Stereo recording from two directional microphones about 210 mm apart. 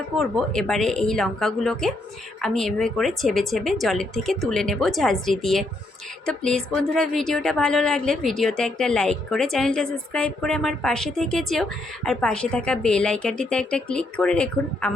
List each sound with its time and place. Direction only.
0.2 s speech: centre (ahead or behind)